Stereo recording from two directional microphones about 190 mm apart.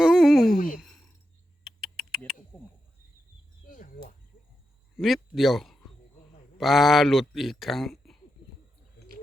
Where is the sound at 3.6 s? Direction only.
45° left (ahead or behind).